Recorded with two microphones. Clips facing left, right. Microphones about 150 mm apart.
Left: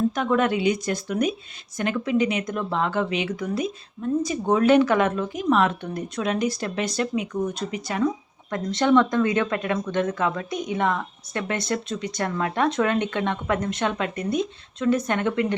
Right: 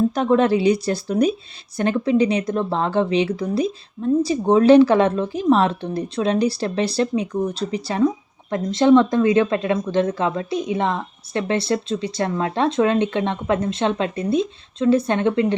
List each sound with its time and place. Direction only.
0.1 s a woman's voice: 35° right (ahead or behind)